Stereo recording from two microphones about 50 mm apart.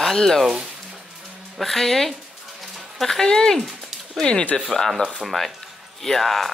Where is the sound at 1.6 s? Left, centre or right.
Centre; by 4.6 s left.